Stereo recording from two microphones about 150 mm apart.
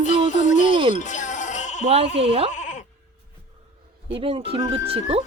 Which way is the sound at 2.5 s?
55° left (ahead or behind).